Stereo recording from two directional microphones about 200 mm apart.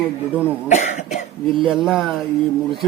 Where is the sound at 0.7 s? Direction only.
35° left (ahead or behind).